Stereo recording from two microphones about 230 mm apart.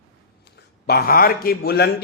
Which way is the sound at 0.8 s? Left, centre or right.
Left.